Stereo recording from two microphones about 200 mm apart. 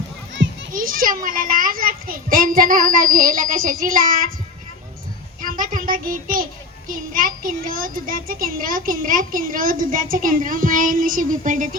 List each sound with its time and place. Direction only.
0.7 s a child's voice: 45° right (ahead or behind)
5.4 s a child's voice: 40° right (ahead or behind)